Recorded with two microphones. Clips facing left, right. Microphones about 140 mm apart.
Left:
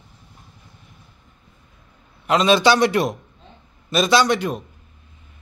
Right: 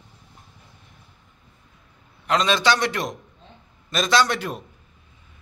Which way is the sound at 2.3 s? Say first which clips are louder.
Left 5 dB; 10° left (ahead or behind).